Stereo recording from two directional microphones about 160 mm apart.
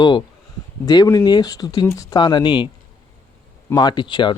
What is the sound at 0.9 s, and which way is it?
Speech, 25° left (ahead or behind).